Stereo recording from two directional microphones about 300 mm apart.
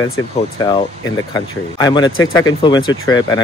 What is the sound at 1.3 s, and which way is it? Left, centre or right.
Speech, centre.